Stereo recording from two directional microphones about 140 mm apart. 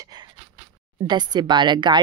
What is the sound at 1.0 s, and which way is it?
Speech, 30° right (ahead or behind).